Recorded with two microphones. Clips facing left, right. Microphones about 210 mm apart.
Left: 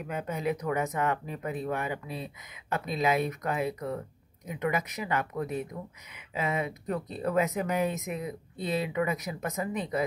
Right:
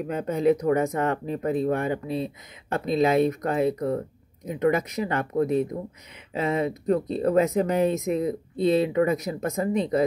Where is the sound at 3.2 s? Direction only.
35° right (ahead or behind).